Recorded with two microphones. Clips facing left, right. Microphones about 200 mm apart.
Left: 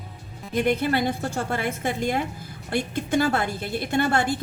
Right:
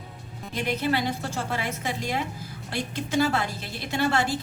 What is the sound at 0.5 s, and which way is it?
A woman's voice, 50° left (ahead or behind).